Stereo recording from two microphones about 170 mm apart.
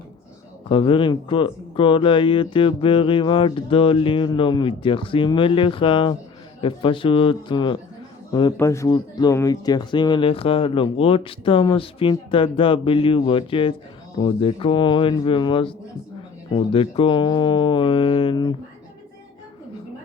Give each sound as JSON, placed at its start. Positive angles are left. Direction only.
{"t": 0.7, "sound": "speech", "side_deg": 30}
{"t": 16.7, "sound": "speech", "side_deg": 30}